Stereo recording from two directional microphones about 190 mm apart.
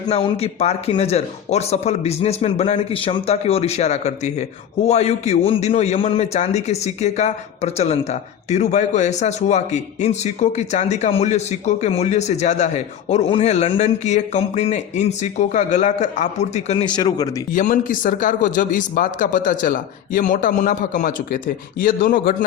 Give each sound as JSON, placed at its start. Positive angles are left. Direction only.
{"t": 0.1, "sound": "a man's voice", "side_deg": 35}
{"t": 17.5, "sound": "speech", "side_deg": 45}